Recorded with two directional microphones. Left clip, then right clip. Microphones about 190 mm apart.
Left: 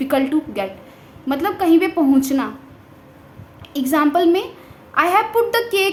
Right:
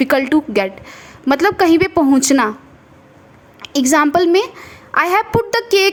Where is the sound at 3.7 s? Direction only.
50° right (ahead or behind).